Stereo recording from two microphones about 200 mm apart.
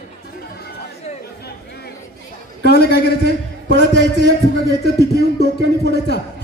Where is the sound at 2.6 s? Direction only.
55° left (ahead or behind).